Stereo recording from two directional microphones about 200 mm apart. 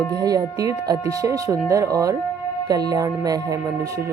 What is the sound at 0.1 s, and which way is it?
Speech, 20° right (ahead or behind).